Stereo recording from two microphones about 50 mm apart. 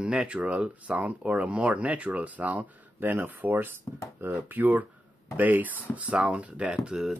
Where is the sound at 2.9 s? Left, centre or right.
Right.